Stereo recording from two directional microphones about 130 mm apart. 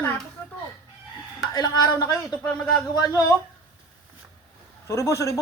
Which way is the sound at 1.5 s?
30° left (ahead or behind).